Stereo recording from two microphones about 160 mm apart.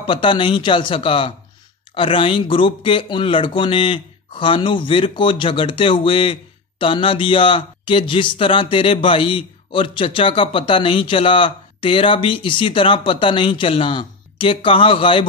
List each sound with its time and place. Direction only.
0.0 s speech: 30° left (ahead or behind)